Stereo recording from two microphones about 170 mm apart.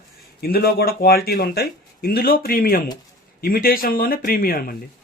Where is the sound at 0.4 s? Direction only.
60° left (ahead or behind).